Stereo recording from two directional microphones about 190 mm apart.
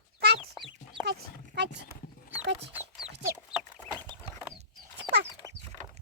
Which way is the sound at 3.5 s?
5° right (ahead or behind).